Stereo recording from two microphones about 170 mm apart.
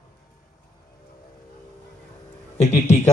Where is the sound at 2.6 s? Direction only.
40° left (ahead or behind).